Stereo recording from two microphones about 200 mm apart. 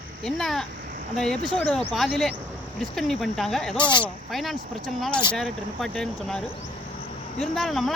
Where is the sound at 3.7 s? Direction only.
25° left (ahead or behind).